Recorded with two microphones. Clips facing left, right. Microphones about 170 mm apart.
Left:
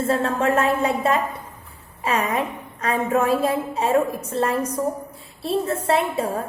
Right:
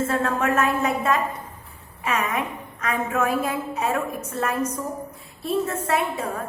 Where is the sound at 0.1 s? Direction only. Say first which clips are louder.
Left 3 dB; 30° left (ahead or behind).